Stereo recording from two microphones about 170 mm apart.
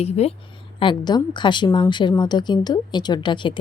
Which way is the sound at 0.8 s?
25° left (ahead or behind).